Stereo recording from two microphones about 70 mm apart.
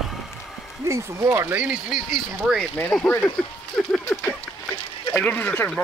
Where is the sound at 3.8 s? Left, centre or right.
Centre.